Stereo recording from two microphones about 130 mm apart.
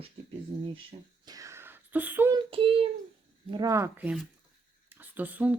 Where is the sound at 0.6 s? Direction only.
40° right (ahead or behind); by 2.3 s 15° right (ahead or behind).